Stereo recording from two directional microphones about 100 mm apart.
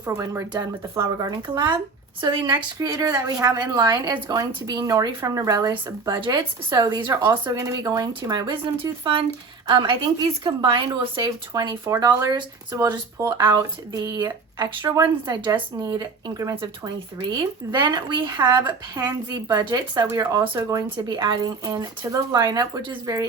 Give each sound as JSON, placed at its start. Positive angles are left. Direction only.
{"t": 0.2, "sound": "speech", "side_deg": -35}
{"t": 2.8, "sound": "speech", "side_deg": -35}
{"t": 6.1, "sound": "speech", "side_deg": -50}
{"t": 7.5, "sound": "speech", "side_deg": -35}
{"t": 12.3, "sound": "speech", "side_deg": -35}
{"t": 17.7, "sound": "speech", "side_deg": -45}